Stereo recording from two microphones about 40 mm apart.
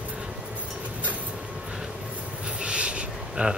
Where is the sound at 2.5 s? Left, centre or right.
Right.